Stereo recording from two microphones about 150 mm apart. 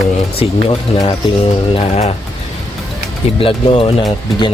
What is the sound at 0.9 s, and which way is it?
Speech, 45° left (ahead or behind).